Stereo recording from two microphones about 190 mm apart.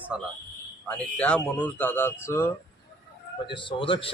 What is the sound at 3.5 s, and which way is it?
Speech, 25° left (ahead or behind).